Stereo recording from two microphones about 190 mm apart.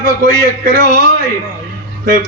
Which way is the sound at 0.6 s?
45° right (ahead or behind).